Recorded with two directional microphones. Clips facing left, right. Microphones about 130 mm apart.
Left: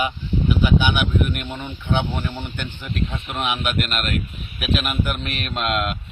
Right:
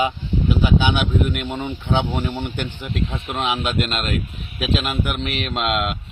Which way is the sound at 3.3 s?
30° right (ahead or behind).